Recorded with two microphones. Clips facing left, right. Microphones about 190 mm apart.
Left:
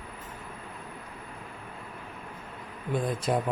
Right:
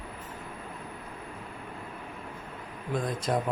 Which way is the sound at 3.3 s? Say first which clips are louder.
Left 1 dB; 5° left (ahead or behind).